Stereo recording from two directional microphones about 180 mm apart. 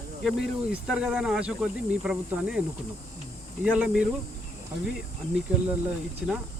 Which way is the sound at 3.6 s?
5° right (ahead or behind).